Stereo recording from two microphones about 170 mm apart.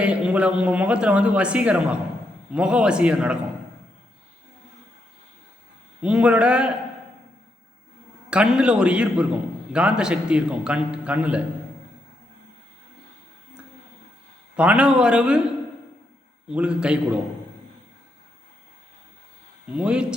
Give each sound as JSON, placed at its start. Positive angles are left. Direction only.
{"t": 0.0, "sound": "a man's voice", "side_deg": -5}
{"t": 6.0, "sound": "a man's voice", "side_deg": -5}
{"t": 8.3, "sound": "a man's voice", "side_deg": -5}
{"t": 14.5, "sound": "a man's voice", "side_deg": -5}
{"t": 16.5, "sound": "a man's voice", "side_deg": -5}
{"t": 19.7, "sound": "a man's voice", "side_deg": -5}